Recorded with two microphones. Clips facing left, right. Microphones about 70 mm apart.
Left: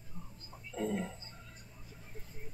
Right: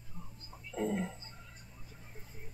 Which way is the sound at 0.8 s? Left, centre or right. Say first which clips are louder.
Right 1 dB; centre.